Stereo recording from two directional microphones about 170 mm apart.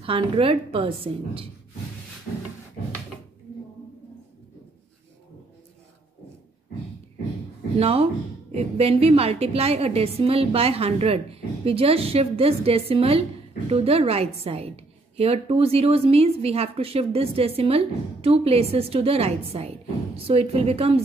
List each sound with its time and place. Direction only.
0.0 s a woman's voice: 30° right (ahead or behind)
7.8 s a woman's voice: 35° right (ahead or behind)